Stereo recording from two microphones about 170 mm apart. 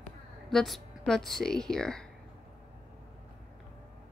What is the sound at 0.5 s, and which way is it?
A woman's voice, centre (ahead or behind).